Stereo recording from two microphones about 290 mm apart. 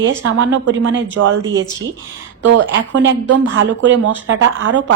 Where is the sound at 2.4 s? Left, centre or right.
Right.